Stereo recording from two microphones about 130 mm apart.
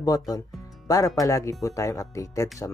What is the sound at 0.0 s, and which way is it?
Speech, 30° left (ahead or behind).